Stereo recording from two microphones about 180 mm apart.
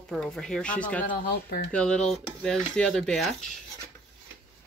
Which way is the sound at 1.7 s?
5° left (ahead or behind).